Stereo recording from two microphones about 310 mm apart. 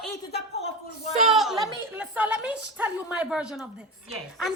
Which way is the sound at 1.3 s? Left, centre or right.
Centre.